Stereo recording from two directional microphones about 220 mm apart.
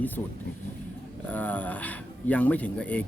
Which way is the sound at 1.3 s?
5° left (ahead or behind).